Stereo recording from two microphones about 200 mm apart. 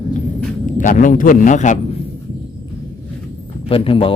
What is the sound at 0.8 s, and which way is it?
A man's voice, 40° left (ahead or behind).